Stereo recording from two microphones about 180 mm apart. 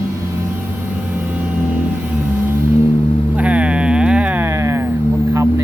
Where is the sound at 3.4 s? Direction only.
5° right (ahead or behind).